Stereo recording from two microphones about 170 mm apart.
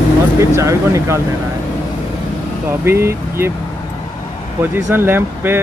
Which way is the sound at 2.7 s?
15° right (ahead or behind).